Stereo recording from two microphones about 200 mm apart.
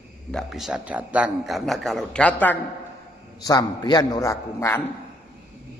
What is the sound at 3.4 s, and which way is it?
A man's voice, 20° left (ahead or behind).